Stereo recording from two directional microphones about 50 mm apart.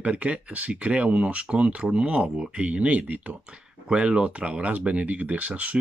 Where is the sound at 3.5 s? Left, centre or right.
Centre.